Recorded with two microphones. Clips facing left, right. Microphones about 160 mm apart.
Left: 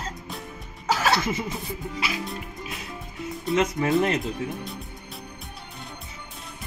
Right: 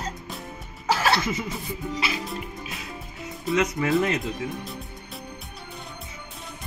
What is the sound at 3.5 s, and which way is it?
Speech, 25° left (ahead or behind).